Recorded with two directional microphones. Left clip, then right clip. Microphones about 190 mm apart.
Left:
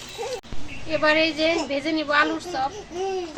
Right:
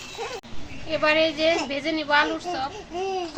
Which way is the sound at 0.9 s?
20° left (ahead or behind).